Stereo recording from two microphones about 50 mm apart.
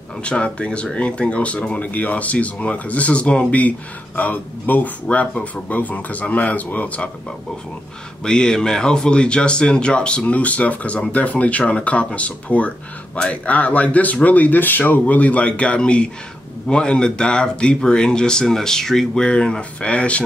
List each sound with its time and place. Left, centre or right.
0.2 s speech: left
5.1 s speech: left
8.2 s speech: centre